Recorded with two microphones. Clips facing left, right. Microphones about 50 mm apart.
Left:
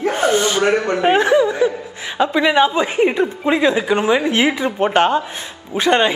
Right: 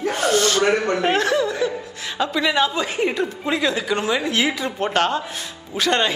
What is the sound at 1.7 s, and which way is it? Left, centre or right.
A woman's voice, centre.